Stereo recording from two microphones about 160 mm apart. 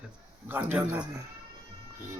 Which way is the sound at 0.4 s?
10° right (ahead or behind).